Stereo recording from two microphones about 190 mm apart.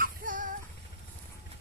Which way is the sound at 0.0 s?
45° right (ahead or behind).